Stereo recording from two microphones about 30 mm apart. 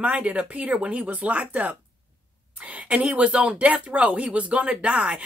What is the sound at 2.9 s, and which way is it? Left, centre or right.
Speech, right.